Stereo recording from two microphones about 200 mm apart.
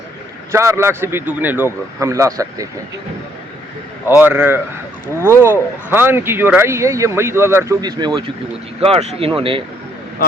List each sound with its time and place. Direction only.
0.5 s speech: 15° right (ahead or behind)
4.2 s speech: 10° right (ahead or behind)
8.8 s speech: 30° right (ahead or behind)